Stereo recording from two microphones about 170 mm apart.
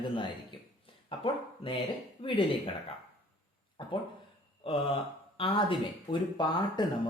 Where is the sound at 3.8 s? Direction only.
30° left (ahead or behind).